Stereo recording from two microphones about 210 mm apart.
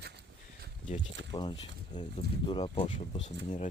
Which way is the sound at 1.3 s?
20° left (ahead or behind).